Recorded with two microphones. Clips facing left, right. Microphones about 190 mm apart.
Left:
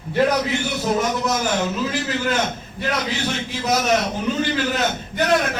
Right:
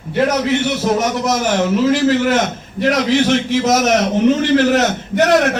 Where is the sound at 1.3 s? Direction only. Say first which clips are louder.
Right 6 dB; 85° right.